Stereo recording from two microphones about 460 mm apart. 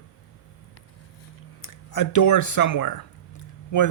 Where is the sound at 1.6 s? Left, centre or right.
Left.